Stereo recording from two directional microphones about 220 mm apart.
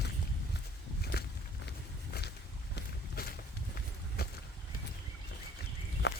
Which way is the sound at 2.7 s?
45° left (ahead or behind).